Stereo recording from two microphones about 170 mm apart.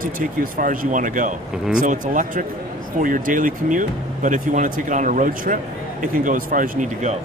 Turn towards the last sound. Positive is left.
turn(degrees=-45)  # may be behind; listen again after turning